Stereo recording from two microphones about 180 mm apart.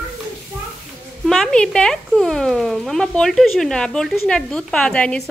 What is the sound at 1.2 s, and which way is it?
Speech, centre (ahead or behind).